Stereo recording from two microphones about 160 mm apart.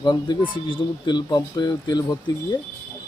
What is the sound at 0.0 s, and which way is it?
Speech, 30° left (ahead or behind).